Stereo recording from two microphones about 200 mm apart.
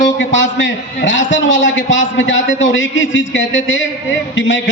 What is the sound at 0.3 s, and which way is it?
A man's voice, 65° left (ahead or behind).